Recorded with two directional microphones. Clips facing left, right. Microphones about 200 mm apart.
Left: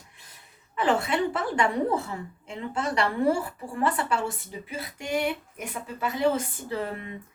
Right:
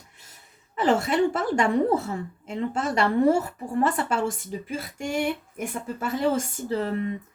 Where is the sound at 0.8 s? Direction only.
45° right (ahead or behind).